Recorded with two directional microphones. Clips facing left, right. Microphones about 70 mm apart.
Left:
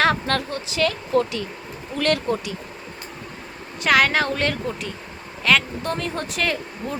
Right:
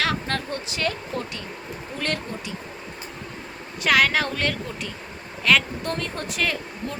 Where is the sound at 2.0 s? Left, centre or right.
Left.